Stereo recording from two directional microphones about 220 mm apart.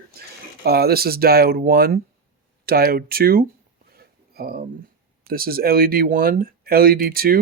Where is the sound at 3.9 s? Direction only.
45° right (ahead or behind).